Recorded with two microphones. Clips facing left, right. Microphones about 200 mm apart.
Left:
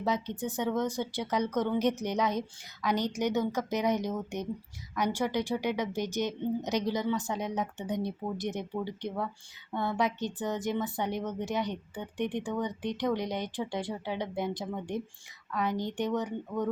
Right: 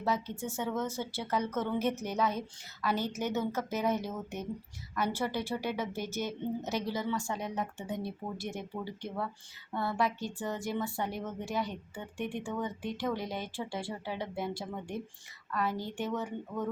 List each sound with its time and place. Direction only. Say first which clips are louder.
0.0 s a woman's voice: left 2 dB; 20° left (ahead or behind)